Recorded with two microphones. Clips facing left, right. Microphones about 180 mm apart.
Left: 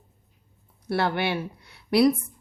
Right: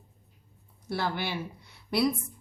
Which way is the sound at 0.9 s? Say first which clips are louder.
Left 6 dB; 65° left (ahead or behind).